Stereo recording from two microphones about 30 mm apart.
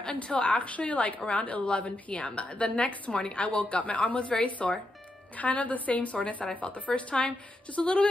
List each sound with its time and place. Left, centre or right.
0.1 s a woman's voice: left